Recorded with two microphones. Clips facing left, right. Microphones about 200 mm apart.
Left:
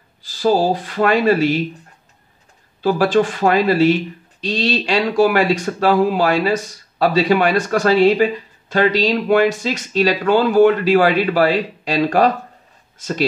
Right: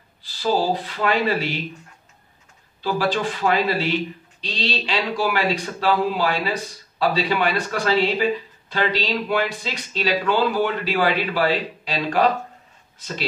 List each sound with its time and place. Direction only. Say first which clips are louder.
0.2 s speech: left 6 dB; 45° left (ahead or behind)
2.8 s speech: left 7 dB; 50° left (ahead or behind)